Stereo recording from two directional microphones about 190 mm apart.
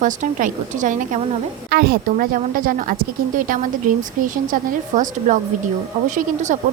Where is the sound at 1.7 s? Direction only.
55° right (ahead or behind).